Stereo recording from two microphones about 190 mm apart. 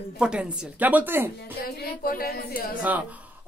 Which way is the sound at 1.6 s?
50° left (ahead or behind).